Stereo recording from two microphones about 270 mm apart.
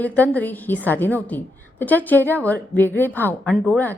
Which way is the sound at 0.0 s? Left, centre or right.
Centre.